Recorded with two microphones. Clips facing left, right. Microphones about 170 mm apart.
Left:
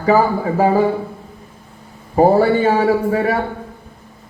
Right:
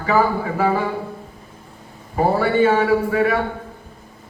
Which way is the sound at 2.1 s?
40° left (ahead or behind).